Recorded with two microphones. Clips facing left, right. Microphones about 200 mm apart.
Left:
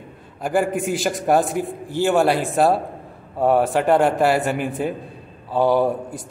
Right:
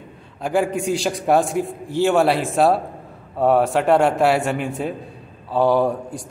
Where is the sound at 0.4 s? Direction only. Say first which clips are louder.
Even; centre (ahead or behind).